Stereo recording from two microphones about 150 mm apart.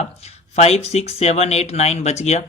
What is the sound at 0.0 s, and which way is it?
Speech, 45° left (ahead or behind).